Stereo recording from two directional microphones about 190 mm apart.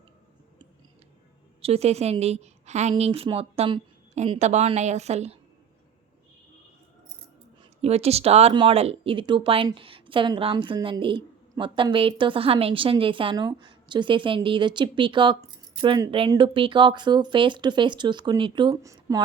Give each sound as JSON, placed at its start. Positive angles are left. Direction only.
{"t": 1.6, "sound": "a woman's voice", "side_deg": -35}
{"t": 7.6, "sound": "speech", "side_deg": -35}